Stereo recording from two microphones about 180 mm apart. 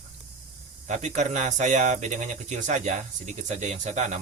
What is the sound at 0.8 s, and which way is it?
Speech, 40° right (ahead or behind).